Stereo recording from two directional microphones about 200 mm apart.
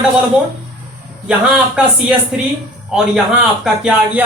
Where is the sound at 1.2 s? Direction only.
5° right (ahead or behind).